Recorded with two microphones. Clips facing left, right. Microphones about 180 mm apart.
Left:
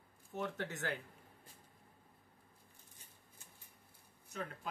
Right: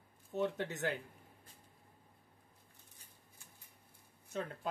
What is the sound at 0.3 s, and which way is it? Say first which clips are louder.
Speech: right 5 dB; 20° right (ahead or behind).